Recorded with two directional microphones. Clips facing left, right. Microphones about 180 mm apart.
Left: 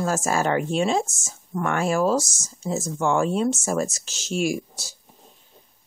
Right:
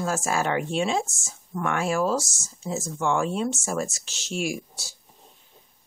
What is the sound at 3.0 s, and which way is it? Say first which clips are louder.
Speech: left 3 dB; 35° left (ahead or behind).